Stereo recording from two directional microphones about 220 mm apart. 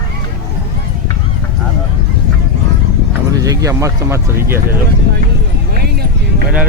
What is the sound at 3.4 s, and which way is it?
Speech, 15° right (ahead or behind).